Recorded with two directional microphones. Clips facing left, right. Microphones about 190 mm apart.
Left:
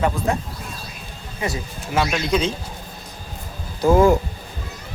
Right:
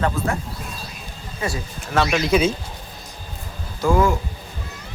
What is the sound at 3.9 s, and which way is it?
Speech, 25° left (ahead or behind).